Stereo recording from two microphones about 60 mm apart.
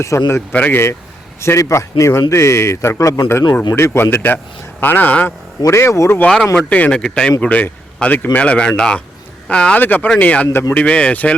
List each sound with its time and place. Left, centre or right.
0.0 s a man's voice: left
0.5 s speech: left
1.4 s a man's voice: left
5.7 s a man's voice: left
6.2 s speech: centre
6.7 s speech: left
7.0 s speech: centre
7.4 s speech: left
9.7 s speech: left